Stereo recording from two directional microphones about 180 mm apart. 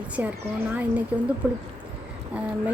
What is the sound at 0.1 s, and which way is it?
A woman's voice, 10° right (ahead or behind).